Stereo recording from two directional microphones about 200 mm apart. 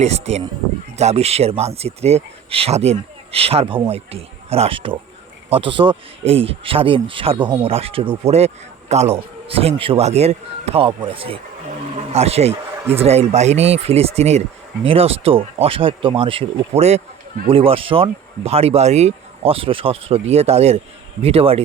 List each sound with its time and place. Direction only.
0.0 s speech: 35° right (ahead or behind)